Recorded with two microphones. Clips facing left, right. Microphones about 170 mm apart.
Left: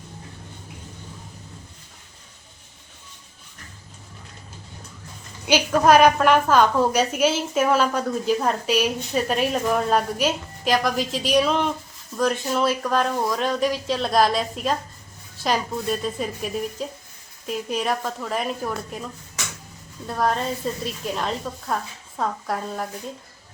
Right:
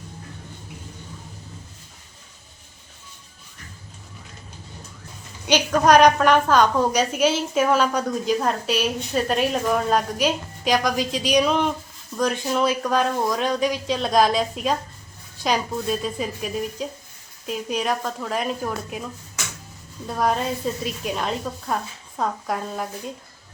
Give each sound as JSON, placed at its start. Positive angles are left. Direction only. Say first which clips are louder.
{"t": 5.5, "sound": "a woman's voice", "louder": "even", "side_deg": 5}
{"t": 20.1, "sound": "a woman's voice", "louder": "right 1 dB", "side_deg": 0}